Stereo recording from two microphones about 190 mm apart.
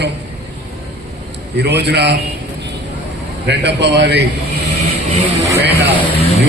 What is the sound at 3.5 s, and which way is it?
Speech, 65° right (ahead or behind).